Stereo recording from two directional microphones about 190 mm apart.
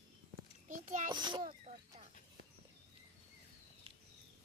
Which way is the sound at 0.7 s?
45° right (ahead or behind).